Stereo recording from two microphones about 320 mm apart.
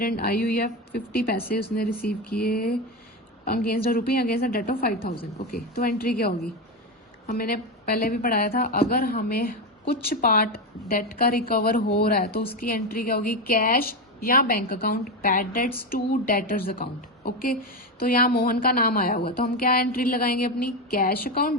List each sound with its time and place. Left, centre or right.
0.0 s a woman's voice: left